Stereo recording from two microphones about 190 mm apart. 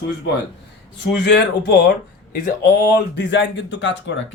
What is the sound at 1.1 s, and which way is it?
Speech, 60° left (ahead or behind).